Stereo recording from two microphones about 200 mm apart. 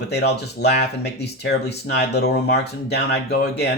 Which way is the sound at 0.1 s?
55° left (ahead or behind).